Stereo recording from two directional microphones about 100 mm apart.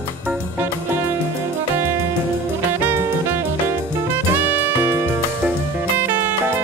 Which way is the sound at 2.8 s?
20° right (ahead or behind).